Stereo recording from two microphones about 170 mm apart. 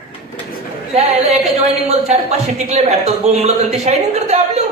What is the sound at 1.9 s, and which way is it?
A man's voice, 40° right (ahead or behind).